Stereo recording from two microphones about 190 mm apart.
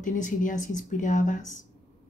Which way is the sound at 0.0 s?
45° left (ahead or behind).